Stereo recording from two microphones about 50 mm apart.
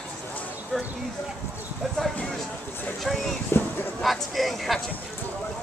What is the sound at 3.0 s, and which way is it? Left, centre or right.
Speech, centre.